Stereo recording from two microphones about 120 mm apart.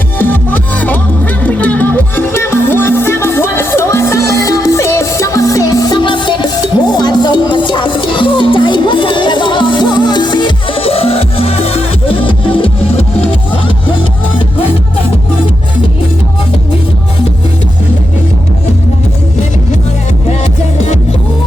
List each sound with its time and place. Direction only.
0.2 s music: 15° left (ahead or behind)
6.0 s music: 40° left (ahead or behind)